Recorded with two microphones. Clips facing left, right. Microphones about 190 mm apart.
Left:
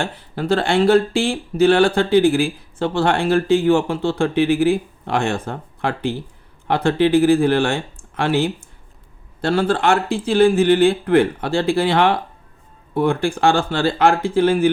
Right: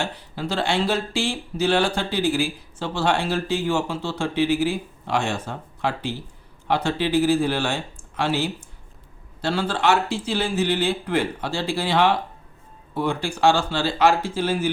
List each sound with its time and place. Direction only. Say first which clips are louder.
0.0 s speech: left 4 dB; 55° left (ahead or behind)